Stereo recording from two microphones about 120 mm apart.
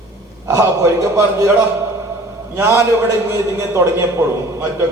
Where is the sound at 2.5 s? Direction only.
25° right (ahead or behind).